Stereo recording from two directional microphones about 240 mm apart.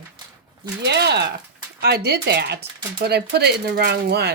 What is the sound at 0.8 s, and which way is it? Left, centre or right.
Speech, right.